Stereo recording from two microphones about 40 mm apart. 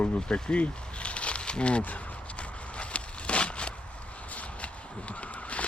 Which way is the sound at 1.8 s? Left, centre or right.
Left.